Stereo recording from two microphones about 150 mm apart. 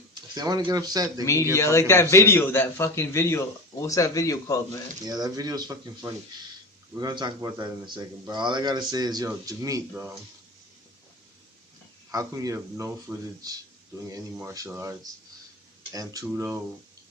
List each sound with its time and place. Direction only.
0.1 s speech: 25° right (ahead or behind)
1.2 s a man's voice: 20° left (ahead or behind)
5.0 s speech: 25° right (ahead or behind)
12.1 s speech: 20° right (ahead or behind)